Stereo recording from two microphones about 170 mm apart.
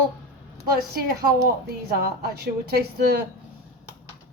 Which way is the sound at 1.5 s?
65° right (ahead or behind).